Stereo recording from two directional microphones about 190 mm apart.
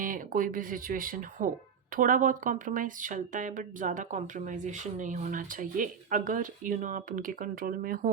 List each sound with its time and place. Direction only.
0.0 s speech: 45° right (ahead or behind)